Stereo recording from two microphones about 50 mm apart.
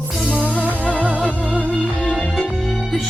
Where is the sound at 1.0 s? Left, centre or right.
Right.